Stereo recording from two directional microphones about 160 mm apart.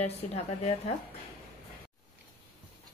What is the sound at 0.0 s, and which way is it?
Speech, 40° left (ahead or behind).